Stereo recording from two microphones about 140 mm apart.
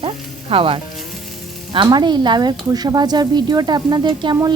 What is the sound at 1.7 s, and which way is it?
Speech, 30° right (ahead or behind).